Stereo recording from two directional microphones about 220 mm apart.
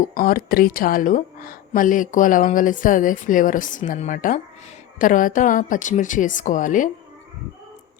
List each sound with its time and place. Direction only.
0.0 s a woman's voice: 40° left (ahead or behind)